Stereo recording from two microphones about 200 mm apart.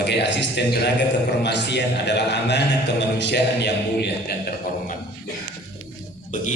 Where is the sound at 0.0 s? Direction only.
60° left (ahead or behind).